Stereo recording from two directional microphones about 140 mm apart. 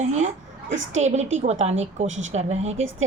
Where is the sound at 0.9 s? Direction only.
55° right (ahead or behind).